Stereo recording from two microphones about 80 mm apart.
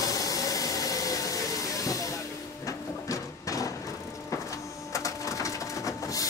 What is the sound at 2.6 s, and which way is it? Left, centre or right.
Printer, left.